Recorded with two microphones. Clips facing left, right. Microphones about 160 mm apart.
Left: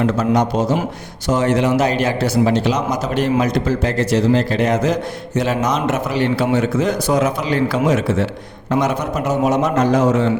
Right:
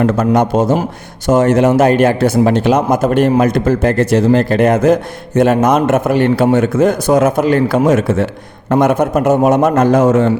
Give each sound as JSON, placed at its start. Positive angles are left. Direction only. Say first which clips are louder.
{"t": 0.0, "sound": "speech", "louder": "right 4 dB", "side_deg": -50}